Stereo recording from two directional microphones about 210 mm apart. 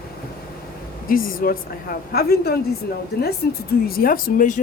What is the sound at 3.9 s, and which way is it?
Speech, 45° left (ahead or behind).